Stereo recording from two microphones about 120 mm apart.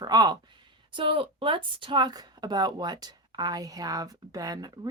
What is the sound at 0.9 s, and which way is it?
Speech, 45° right (ahead or behind).